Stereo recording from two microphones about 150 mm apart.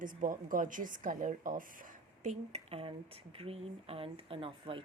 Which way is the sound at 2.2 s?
50° right (ahead or behind).